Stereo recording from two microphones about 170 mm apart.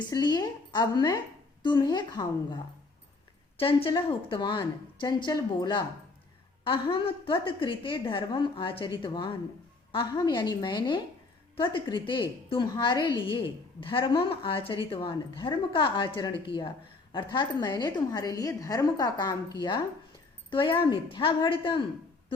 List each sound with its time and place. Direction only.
0.1 s a woman's voice: 25° left (ahead or behind)
3.6 s a woman's voice: 30° left (ahead or behind)